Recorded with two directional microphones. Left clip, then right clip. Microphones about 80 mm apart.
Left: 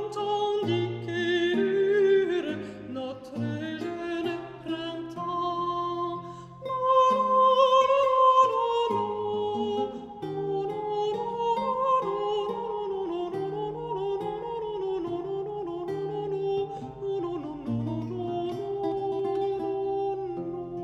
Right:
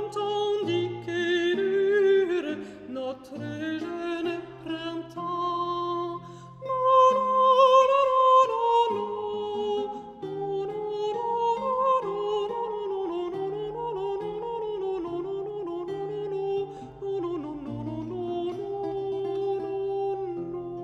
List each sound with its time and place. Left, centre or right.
0.2 s music: right
1.7 s humming: right
4.1 s music: right
18.8 s music: left
19.9 s music: right